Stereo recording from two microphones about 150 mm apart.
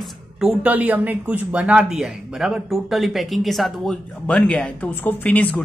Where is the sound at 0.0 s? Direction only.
5° right (ahead or behind).